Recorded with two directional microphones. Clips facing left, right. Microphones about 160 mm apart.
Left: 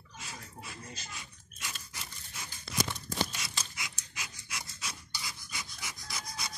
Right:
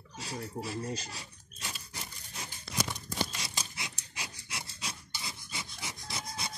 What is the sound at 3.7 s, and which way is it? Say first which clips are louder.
Pant: right 1 dB; 30° right (ahead or behind).